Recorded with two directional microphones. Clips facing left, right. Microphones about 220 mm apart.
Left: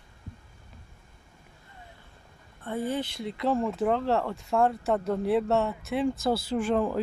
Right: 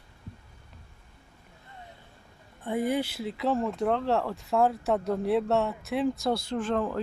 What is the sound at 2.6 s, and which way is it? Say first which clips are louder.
Speech: right 3 dB; 15° right (ahead or behind).